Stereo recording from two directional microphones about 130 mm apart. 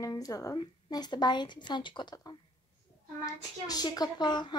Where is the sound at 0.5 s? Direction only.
35° left (ahead or behind).